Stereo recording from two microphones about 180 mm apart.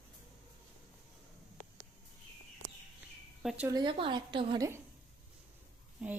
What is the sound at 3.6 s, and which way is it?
A woman's voice, 25° right (ahead or behind).